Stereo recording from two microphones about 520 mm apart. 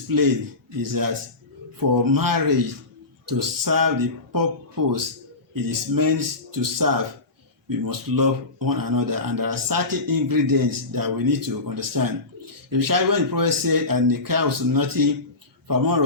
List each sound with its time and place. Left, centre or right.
0.1 s speech: right